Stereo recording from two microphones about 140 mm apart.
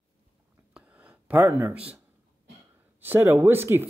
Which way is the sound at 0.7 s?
10° right (ahead or behind).